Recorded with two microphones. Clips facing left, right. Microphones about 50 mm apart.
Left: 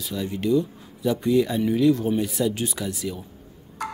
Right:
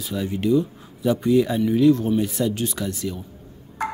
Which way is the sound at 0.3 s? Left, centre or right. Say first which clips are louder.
Right 2 dB; centre.